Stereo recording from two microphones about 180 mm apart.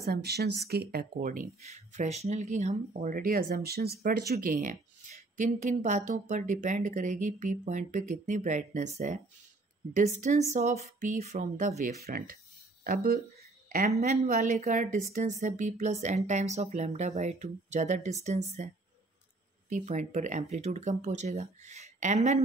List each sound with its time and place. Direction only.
0.0 s speech: 65° right (ahead or behind)
13.7 s speech: 40° right (ahead or behind)
19.7 s speech: 45° right (ahead or behind)